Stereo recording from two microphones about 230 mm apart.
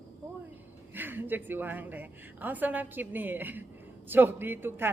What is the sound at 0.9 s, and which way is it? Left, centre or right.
A man's voice, centre.